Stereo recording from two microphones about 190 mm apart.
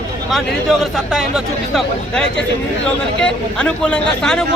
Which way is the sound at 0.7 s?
Centre (ahead or behind).